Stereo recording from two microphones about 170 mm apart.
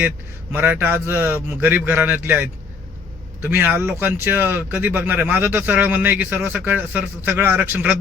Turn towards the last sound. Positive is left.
turn(degrees=-10)  # may be behind; listen again after turning